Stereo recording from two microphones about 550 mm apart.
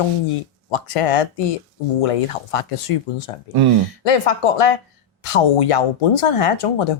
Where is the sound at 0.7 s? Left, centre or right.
Left.